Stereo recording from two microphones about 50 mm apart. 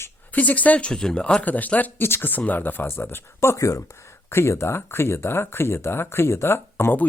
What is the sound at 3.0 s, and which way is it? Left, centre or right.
Speech, left.